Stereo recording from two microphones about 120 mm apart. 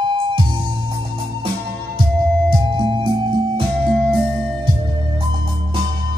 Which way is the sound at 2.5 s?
40° right (ahead or behind).